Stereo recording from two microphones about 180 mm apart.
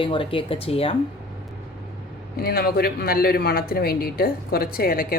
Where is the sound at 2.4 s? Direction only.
60° left (ahead or behind).